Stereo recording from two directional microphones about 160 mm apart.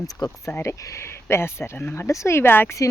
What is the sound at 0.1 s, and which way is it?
Speech, 20° left (ahead or behind).